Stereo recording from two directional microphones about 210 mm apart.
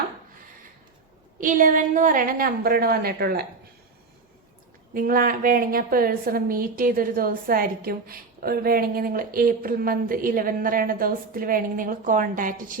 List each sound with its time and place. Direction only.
1.4 s a woman's voice: 40° right (ahead or behind)
4.9 s a woman's voice: 45° right (ahead or behind)